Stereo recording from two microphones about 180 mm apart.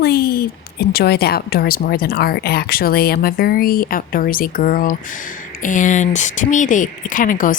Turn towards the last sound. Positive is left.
turn(degrees=50)  # may be behind; listen again after turning